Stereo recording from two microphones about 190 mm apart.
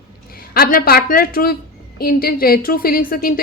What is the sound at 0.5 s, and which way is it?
A woman's voice, 55° left (ahead or behind).